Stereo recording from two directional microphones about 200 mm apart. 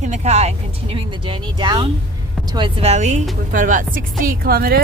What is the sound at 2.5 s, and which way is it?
A woman's voice, 25° right (ahead or behind).